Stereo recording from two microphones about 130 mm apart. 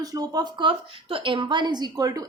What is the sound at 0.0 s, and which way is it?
A woman's voice, 30° right (ahead or behind).